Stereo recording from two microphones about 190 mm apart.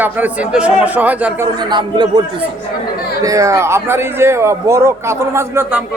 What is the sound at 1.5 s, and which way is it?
Speech, 25° right (ahead or behind).